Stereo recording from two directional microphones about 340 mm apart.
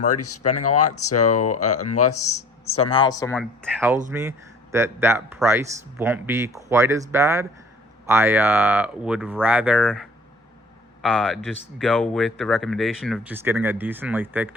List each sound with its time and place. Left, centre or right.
0.1 s speech: left
2.9 s speech: centre